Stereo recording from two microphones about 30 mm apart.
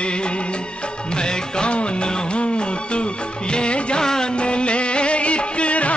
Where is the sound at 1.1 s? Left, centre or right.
Left.